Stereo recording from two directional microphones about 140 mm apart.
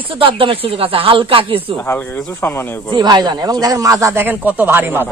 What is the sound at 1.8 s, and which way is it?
Speech, 15° left (ahead or behind).